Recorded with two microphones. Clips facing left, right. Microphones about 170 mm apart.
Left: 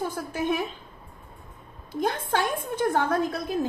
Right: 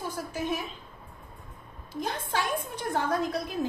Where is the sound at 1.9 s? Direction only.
55° left (ahead or behind).